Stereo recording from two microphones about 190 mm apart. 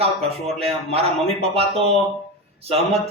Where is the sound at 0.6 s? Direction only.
30° right (ahead or behind).